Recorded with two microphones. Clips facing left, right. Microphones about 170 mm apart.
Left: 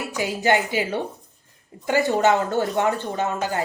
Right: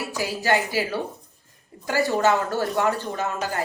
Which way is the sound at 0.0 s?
20° left (ahead or behind).